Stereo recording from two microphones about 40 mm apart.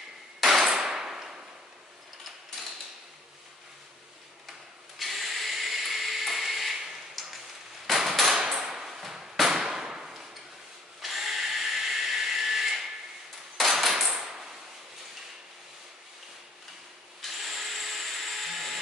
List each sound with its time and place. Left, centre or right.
0.4 s clang: centre
2.6 s mechanisms: centre
4.9 s tools: centre
7.8 s hammer: centre
8.4 s a sound: centre
11.0 s drill: centre
13.6 s a sound: centre
14.1 s a sound: centre
17.2 s drill: centre